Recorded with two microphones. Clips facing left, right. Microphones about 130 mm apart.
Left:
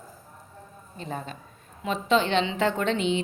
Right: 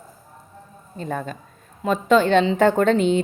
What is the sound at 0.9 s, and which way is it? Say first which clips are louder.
A woman's voice: right 7 dB; 50° right (ahead or behind).